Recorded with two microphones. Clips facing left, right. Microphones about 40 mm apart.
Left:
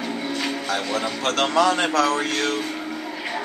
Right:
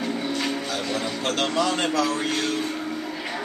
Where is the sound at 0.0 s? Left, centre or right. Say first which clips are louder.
Even; centre.